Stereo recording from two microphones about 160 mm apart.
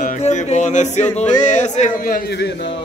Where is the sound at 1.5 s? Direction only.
50° left (ahead or behind).